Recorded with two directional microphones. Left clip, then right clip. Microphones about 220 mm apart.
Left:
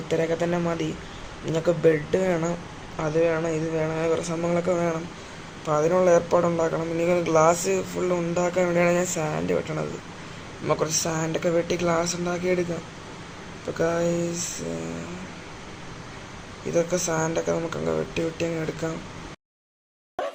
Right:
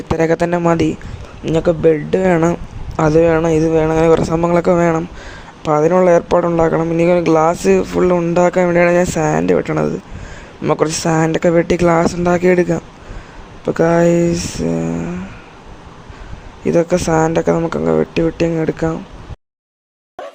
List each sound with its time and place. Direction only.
0.2 s speech: 50° right (ahead or behind)
13.7 s speech: 40° right (ahead or behind)
16.6 s speech: 40° right (ahead or behind)